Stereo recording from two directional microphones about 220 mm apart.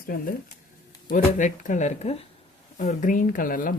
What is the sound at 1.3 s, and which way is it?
Speech, 35° left (ahead or behind).